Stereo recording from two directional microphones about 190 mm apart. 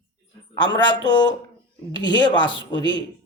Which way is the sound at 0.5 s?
25° left (ahead or behind).